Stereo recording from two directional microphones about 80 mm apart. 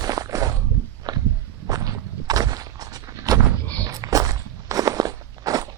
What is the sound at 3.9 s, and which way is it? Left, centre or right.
Walk, right.